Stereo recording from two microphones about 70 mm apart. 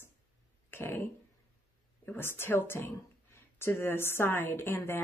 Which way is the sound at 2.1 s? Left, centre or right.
Left.